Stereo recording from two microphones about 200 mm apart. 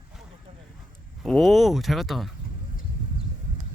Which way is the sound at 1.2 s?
Centre (ahead or behind).